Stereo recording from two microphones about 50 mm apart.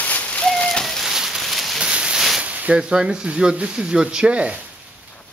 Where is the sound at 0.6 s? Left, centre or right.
Centre.